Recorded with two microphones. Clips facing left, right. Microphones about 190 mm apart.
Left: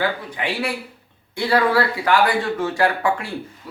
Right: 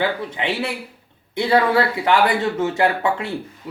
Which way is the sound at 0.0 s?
25° right (ahead or behind).